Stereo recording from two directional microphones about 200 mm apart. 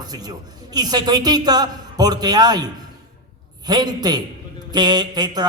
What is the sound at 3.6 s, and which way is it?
A man's voice, 20° right (ahead or behind).